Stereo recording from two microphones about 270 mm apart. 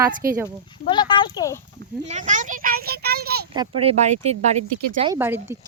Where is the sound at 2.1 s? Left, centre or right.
Right.